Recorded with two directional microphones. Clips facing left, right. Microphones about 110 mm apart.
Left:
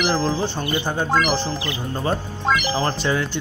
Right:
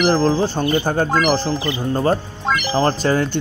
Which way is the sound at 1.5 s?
Centre (ahead or behind).